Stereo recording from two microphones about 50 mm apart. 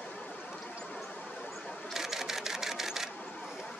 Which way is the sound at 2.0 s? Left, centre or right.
Centre.